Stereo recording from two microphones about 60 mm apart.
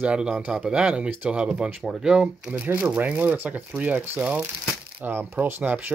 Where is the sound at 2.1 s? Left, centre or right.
Centre.